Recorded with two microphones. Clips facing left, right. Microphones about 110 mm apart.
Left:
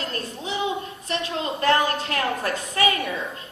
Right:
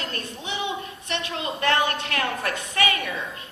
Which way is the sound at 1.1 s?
35° left (ahead or behind).